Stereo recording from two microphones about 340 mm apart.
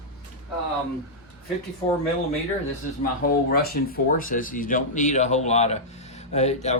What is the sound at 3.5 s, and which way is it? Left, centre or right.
Speech, left.